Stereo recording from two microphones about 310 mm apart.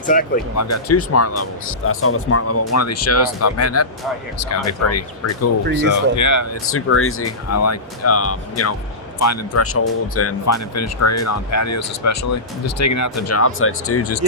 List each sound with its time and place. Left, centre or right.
0.0 s speech: left
0.5 s speech: left
6.7 s speech: left